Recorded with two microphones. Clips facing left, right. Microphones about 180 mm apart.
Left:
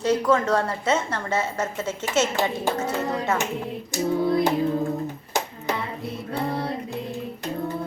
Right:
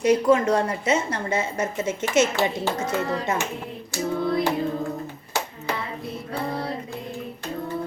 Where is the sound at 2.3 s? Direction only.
10° left (ahead or behind).